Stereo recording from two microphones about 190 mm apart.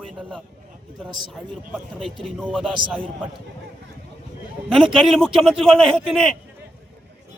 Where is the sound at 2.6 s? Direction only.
25° right (ahead or behind).